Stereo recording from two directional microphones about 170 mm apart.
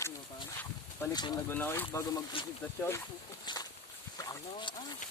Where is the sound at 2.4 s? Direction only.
30° left (ahead or behind).